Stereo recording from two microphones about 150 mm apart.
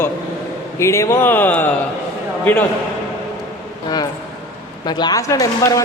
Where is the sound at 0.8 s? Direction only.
20° left (ahead or behind).